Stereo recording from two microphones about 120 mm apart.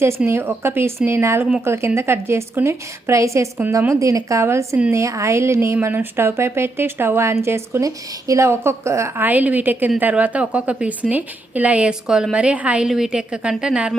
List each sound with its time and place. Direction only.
0.3 s a woman's voice: 20° right (ahead or behind)